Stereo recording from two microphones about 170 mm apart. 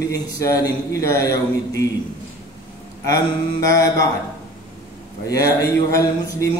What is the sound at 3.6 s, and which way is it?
Speech, 20° left (ahead or behind).